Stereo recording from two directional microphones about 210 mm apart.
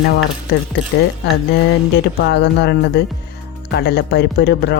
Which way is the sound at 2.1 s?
55° left (ahead or behind).